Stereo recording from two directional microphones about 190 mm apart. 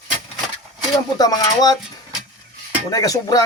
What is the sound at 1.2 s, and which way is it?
Speech, 20° left (ahead or behind).